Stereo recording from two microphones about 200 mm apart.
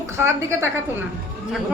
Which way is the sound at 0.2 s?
10° right (ahead or behind).